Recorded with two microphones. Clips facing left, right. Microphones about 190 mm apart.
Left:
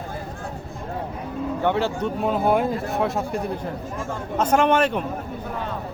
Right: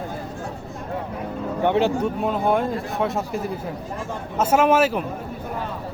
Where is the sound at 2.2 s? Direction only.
5° left (ahead or behind).